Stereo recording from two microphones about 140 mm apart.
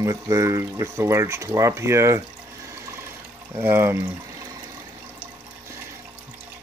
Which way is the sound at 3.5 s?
15° right (ahead or behind).